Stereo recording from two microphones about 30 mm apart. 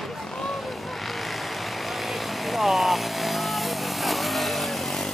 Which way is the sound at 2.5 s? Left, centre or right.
Centre.